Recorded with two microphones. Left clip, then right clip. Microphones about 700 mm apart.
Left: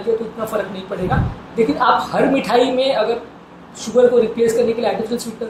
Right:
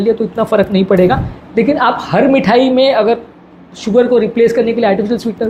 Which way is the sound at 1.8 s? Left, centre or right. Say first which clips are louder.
Even; right.